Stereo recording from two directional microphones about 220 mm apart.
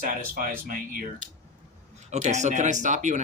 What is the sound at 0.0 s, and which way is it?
Speech, 40° right (ahead or behind).